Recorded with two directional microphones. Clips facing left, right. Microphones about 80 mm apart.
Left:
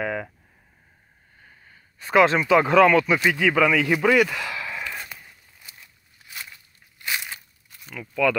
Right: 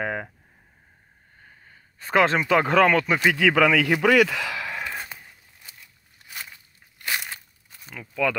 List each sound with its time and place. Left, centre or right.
0.0 s a sound: right
1.4 s speech: right
3.3 s speech: right
4.8 s a sound: right
7.0 s crumpling: right
7.8 s speech: right